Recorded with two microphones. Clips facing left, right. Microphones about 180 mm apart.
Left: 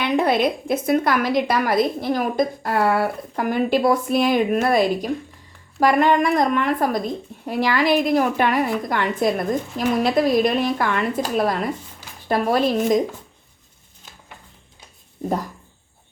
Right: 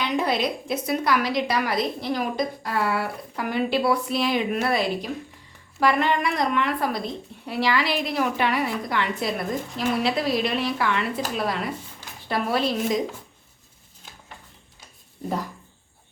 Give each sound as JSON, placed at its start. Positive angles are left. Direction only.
{"t": 0.0, "sound": "a woman's voice", "side_deg": 55}